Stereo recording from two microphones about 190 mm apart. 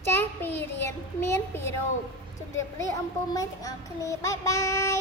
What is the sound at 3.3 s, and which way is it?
A woman's voice, 20° left (ahead or behind).